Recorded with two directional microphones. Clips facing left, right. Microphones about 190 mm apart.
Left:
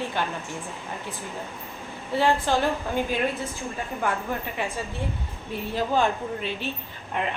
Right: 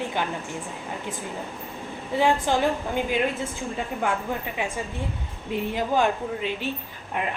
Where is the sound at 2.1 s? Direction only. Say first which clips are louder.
Right 1 dB; 15° right (ahead or behind).